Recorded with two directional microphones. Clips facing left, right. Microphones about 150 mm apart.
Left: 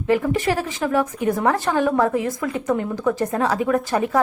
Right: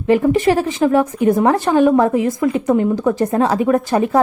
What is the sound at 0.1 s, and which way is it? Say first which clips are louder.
A woman's voice: right 6 dB; 25° right (ahead or behind).